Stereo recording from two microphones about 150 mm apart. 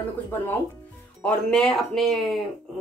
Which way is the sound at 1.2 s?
5° left (ahead or behind).